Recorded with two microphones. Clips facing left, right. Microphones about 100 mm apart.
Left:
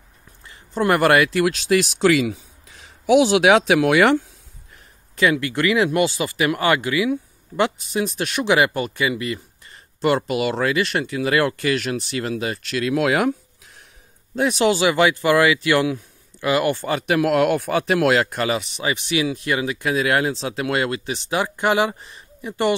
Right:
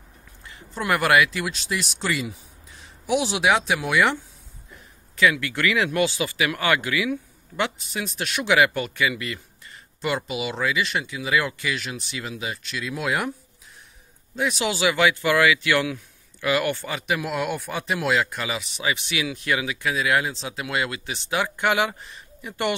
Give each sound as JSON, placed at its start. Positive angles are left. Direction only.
{"t": 0.7, "sound": "speech", "side_deg": 40}
{"t": 1.4, "sound": "speech", "side_deg": 80}
{"t": 5.1, "sound": "speech", "side_deg": 35}
{"t": 10.0, "sound": "speech", "side_deg": 55}
{"t": 14.4, "sound": "speech", "side_deg": 50}
{"t": 14.8, "sound": "speech", "side_deg": 35}
{"t": 16.8, "sound": "speech", "side_deg": 45}
{"t": 17.2, "sound": "speech", "side_deg": 75}
{"t": 18.8, "sound": "speech", "side_deg": 30}